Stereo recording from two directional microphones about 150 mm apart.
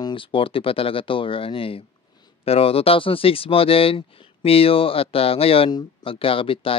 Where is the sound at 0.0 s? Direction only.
35° left (ahead or behind).